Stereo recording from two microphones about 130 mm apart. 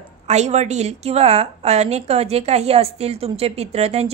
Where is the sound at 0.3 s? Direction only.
60° right (ahead or behind).